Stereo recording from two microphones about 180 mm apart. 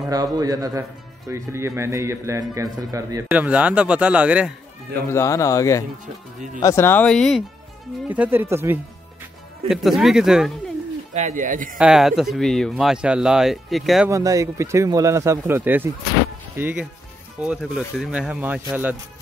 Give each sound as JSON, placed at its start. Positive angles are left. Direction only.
{"t": 0.1, "sound": "a man's voice", "side_deg": -20}
{"t": 3.3, "sound": "speech", "side_deg": -5}
{"t": 5.0, "sound": "speech", "side_deg": 15}
{"t": 8.1, "sound": "speech", "side_deg": -10}
{"t": 9.7, "sound": "speech", "side_deg": 0}
{"t": 11.1, "sound": "speech", "side_deg": -45}
{"t": 11.8, "sound": "speech", "side_deg": -5}
{"t": 14.0, "sound": "speech", "side_deg": -20}